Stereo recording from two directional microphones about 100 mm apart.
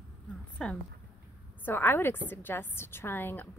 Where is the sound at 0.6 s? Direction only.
10° left (ahead or behind).